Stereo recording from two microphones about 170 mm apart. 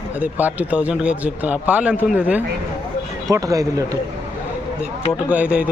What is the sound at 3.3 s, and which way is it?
Speech, 20° right (ahead or behind).